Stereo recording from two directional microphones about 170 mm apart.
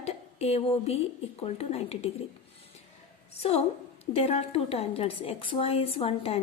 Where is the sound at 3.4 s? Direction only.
35° left (ahead or behind).